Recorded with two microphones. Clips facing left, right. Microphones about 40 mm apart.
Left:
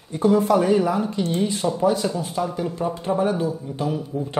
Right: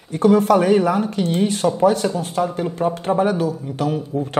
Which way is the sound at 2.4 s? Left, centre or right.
Right.